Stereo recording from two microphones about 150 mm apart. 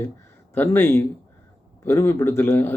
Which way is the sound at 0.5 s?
15° left (ahead or behind).